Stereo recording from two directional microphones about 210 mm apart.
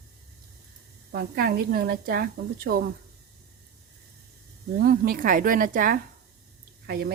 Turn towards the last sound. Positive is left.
turn(degrees=-45)  # may be behind; listen again after turning